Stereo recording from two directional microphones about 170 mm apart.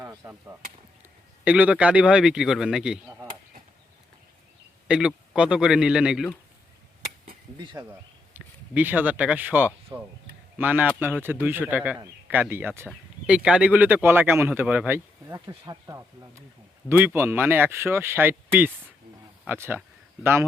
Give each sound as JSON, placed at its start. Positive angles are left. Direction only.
{"t": 0.0, "sound": "chop", "side_deg": -15}
{"t": 1.5, "sound": "a man's voice", "side_deg": -10}
{"t": 4.9, "sound": "a man's voice", "side_deg": -5}
{"t": 7.6, "sound": "speech", "side_deg": -25}
{"t": 7.9, "sound": "speech", "side_deg": -10}
{"t": 19.5, "sound": "speech", "side_deg": -15}